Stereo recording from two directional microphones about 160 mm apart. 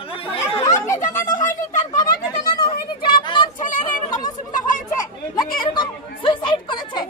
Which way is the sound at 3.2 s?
30° left (ahead or behind).